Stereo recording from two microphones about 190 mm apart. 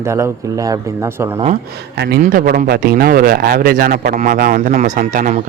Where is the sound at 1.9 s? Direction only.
55° right (ahead or behind).